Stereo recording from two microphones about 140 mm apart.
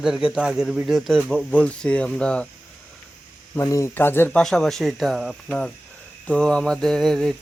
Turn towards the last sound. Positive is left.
turn(degrees=0)  # may be behind; listen again after turning